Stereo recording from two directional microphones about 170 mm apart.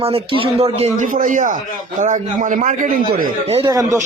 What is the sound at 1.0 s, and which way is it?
A man's voice, 50° right (ahead or behind).